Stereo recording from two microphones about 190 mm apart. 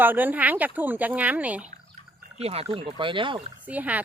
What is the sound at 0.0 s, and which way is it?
Speech, 10° right (ahead or behind).